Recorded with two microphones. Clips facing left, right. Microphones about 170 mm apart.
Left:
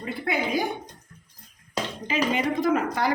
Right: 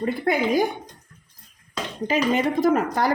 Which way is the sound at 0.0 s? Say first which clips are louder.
Right 6 dB; 45° right (ahead or behind).